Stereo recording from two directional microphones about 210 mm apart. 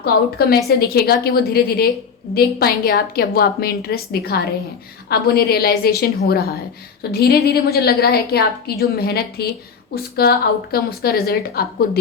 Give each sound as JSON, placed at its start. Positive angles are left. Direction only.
{"t": 0.0, "sound": "a woman's voice", "side_deg": 45}